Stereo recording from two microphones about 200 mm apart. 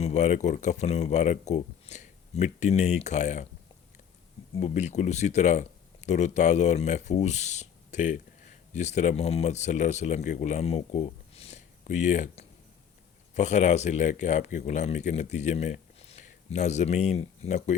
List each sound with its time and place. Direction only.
0.0 s speech: 35° left (ahead or behind)
4.6 s speech: 35° left (ahead or behind)